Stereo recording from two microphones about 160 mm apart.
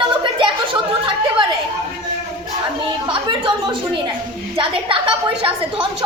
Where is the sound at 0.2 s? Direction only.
30° right (ahead or behind).